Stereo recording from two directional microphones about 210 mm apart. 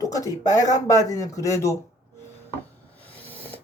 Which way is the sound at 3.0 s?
10° left (ahead or behind).